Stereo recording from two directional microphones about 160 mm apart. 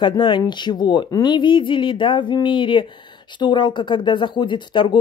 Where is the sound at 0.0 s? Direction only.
30° left (ahead or behind).